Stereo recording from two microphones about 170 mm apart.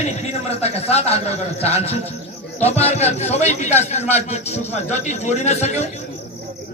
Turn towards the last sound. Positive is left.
turn(degrees=40)  # may be behind; listen again after turning